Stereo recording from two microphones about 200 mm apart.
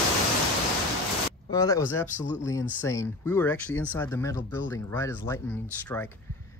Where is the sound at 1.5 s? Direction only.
15° left (ahead or behind).